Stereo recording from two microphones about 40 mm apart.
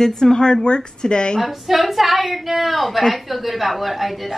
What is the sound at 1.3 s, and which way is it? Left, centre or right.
A woman's voice, centre.